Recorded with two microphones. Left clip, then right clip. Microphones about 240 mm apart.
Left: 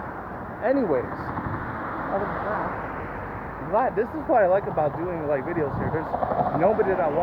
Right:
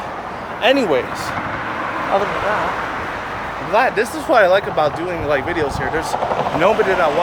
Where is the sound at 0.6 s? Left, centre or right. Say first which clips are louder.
Right 8 dB; right.